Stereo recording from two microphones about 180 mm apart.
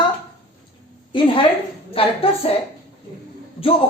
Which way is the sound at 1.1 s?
30° left (ahead or behind).